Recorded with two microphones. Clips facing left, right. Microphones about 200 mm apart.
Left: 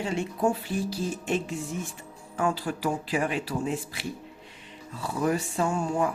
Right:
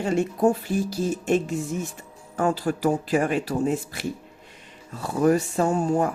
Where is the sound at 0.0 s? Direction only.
45° right (ahead or behind).